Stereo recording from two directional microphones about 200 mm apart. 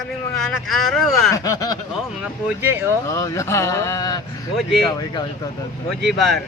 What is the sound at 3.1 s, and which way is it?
Speech, 15° left (ahead or behind).